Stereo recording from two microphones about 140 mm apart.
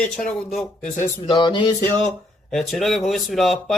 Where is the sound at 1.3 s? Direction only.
35° left (ahead or behind).